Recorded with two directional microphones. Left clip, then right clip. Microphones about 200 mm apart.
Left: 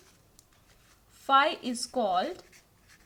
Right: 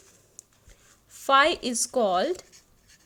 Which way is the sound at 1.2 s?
45° right (ahead or behind).